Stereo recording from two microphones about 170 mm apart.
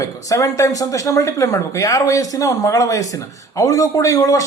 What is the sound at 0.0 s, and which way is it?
Speech, 20° left (ahead or behind).